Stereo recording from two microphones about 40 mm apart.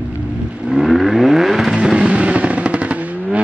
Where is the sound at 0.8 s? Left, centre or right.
Centre.